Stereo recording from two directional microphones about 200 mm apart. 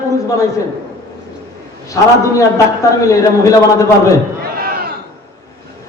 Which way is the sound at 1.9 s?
15° left (ahead or behind).